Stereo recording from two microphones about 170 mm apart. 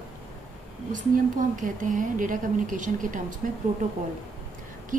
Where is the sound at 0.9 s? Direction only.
50° right (ahead or behind).